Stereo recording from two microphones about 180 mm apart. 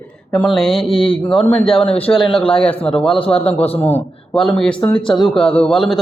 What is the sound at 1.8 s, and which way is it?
Speech, 30° left (ahead or behind).